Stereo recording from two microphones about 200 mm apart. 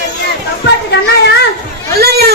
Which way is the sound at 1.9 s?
50° right (ahead or behind).